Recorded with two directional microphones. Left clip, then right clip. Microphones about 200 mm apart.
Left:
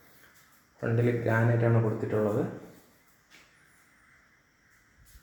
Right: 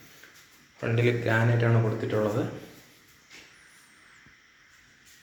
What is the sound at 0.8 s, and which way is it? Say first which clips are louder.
Speech: right 2 dB; 30° left (ahead or behind).